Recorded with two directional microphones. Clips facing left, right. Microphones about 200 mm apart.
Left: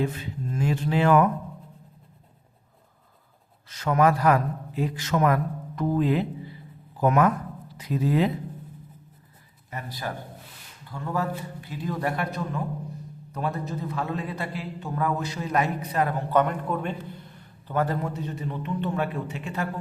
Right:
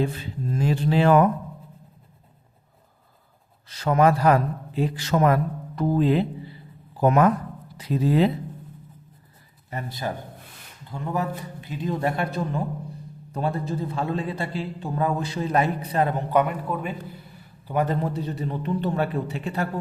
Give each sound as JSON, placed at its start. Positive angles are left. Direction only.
{"t": 0.0, "sound": "a man's voice", "side_deg": -30}
{"t": 3.7, "sound": "a man's voice", "side_deg": -35}
{"t": 9.6, "sound": "a man's voice", "side_deg": -25}
{"t": 16.3, "sound": "a man's voice", "side_deg": -10}
{"t": 17.8, "sound": "a man's voice", "side_deg": -35}